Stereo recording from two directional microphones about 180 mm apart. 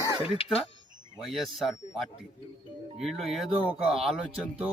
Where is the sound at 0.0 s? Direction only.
15° right (ahead or behind).